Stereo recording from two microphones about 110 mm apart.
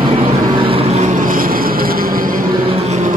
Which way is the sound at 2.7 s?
90° right.